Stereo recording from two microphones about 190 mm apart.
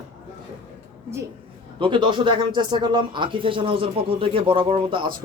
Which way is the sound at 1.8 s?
25° right (ahead or behind).